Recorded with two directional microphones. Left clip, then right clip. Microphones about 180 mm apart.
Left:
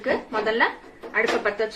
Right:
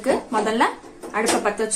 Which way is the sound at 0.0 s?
45° right (ahead or behind).